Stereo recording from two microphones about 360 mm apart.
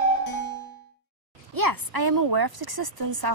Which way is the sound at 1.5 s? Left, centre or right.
Right.